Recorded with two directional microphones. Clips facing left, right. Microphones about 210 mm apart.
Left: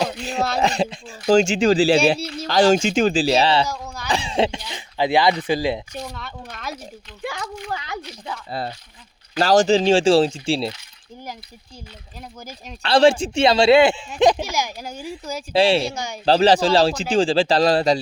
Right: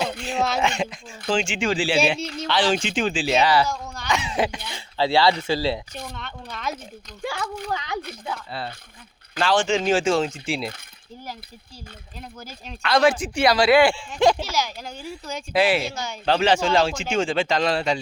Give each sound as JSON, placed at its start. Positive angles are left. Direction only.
{"t": 0.3, "sound": "speech", "side_deg": 0}
{"t": 0.6, "sound": "speech", "side_deg": 35}
{"t": 3.7, "sound": "a sound", "side_deg": 5}
{"t": 4.1, "sound": "speech", "side_deg": 30}
{"t": 6.1, "sound": "speech", "side_deg": 0}
{"t": 8.5, "sound": "speech", "side_deg": 40}
{"t": 12.8, "sound": "speech", "side_deg": 30}
{"t": 15.5, "sound": "speech", "side_deg": 30}